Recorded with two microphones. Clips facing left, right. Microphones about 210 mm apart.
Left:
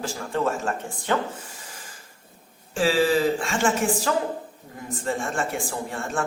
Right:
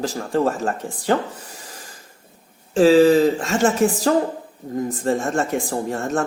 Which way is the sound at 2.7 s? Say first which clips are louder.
Right 9 dB; 40° right (ahead or behind).